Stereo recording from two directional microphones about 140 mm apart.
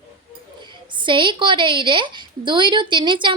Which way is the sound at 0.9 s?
35° right (ahead or behind).